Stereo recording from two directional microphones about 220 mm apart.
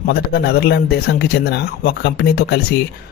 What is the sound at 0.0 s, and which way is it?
Speech, 45° left (ahead or behind).